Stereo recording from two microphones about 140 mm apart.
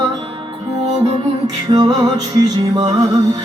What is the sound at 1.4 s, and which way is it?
Music, 30° right (ahead or behind).